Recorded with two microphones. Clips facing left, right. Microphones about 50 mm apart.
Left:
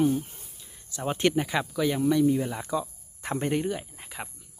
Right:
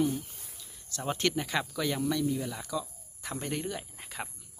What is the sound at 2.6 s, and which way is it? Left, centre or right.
Speech, left.